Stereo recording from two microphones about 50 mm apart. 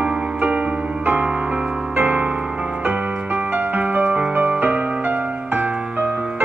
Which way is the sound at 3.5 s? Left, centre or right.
Right.